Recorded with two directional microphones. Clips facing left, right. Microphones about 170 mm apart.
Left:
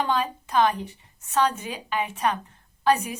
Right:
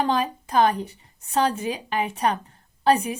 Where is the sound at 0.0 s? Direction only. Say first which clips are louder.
Right 2 dB; 35° right (ahead or behind).